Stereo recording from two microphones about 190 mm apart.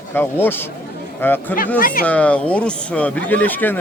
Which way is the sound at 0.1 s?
10° left (ahead or behind).